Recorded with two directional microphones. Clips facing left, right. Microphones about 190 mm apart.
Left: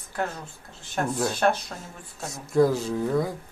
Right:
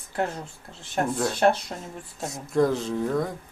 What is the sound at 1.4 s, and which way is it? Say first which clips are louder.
Speech: right 4 dB; 25° right (ahead or behind).